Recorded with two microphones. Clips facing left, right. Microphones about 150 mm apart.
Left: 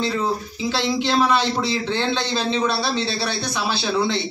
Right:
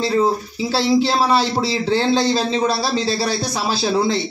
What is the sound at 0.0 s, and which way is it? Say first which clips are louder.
Speech: right 5 dB; 35° right (ahead or behind).